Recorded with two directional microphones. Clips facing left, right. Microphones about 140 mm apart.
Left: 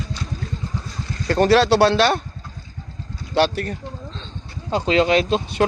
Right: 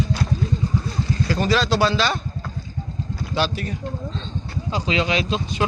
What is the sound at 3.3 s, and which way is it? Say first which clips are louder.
Speech: left 5 dB; 60° left (ahead or behind).